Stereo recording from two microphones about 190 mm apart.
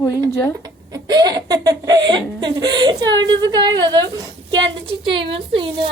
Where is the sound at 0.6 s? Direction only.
20° right (ahead or behind).